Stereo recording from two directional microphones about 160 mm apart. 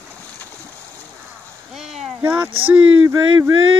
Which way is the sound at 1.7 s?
Centre (ahead or behind).